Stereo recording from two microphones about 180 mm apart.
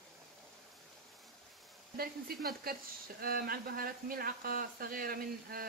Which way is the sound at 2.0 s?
55° right (ahead or behind).